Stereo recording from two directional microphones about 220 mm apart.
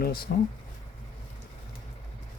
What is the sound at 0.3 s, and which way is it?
Speech, 40° left (ahead or behind).